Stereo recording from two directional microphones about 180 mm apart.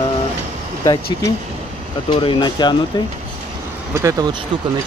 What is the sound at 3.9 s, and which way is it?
Speech, 20° right (ahead or behind).